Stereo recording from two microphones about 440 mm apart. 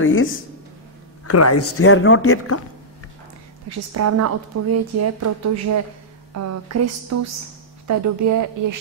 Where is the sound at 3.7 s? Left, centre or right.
Right.